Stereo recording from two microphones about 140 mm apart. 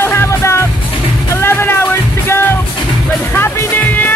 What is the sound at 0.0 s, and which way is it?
Music, 20° left (ahead or behind).